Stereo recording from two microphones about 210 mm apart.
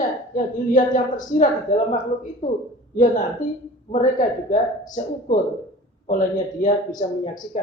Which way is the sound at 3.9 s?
40° left (ahead or behind).